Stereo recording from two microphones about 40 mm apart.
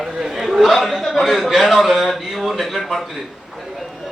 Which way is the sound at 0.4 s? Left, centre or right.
Centre.